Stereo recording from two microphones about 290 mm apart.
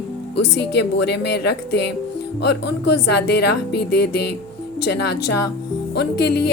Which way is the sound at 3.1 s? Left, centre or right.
Left.